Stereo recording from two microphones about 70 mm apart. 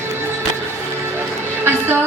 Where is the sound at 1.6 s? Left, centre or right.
Right.